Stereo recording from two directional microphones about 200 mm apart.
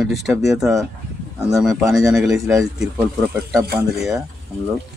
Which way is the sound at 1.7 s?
15° right (ahead or behind).